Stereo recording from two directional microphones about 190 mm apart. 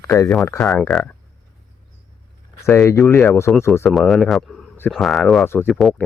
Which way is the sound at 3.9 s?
Centre (ahead or behind).